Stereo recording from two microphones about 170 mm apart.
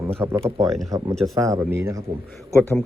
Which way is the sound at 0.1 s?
15° right (ahead or behind).